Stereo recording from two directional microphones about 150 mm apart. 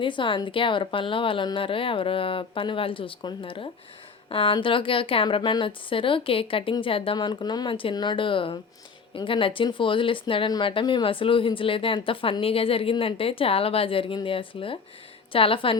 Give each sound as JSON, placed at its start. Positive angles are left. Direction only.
{"t": 0.0, "sound": "speech", "side_deg": 35}